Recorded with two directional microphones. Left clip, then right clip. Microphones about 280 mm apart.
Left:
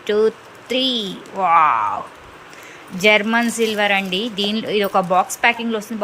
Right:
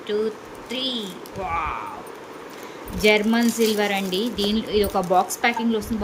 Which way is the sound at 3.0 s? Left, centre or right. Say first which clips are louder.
Left 4 dB; centre.